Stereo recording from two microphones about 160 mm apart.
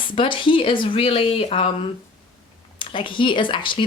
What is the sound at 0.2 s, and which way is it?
Speech, 30° left (ahead or behind).